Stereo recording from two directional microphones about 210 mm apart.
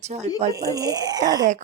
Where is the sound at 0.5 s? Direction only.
15° right (ahead or behind).